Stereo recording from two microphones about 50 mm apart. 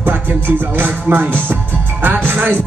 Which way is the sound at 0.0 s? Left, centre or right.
Right.